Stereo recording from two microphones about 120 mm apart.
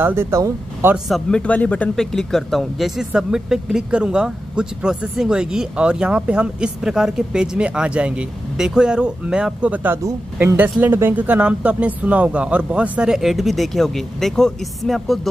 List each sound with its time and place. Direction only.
0.0 s speech: 20° right (ahead or behind)
0.9 s speech: centre (ahead or behind)
1.4 s speech: 10° left (ahead or behind)